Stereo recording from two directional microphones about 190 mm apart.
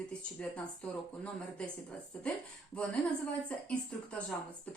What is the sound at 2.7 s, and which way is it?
Speech, 5° left (ahead or behind).